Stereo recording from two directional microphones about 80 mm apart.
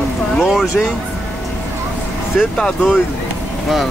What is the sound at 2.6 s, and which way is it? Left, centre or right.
Speech, centre.